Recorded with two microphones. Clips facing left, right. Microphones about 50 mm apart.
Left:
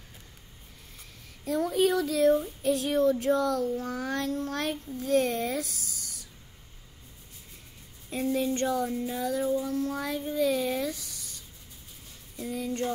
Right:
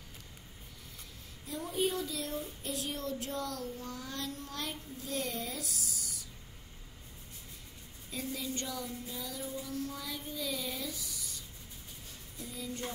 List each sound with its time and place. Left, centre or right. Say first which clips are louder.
1.4 s speech: left 9 dB; left
3.2 s female singing: left 12 dB; left
8.1 s female singing: left 11 dB; left